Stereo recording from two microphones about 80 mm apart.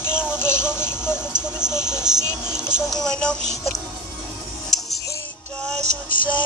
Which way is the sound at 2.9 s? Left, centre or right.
Centre.